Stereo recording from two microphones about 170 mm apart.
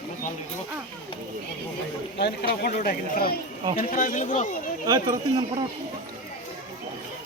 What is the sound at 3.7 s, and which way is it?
Speech, 50° left (ahead or behind).